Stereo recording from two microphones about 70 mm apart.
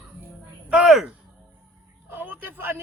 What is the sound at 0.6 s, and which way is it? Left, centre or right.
Speech, centre.